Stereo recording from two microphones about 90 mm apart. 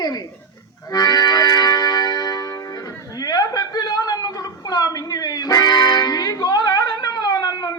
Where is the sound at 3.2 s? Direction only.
45° left (ahead or behind).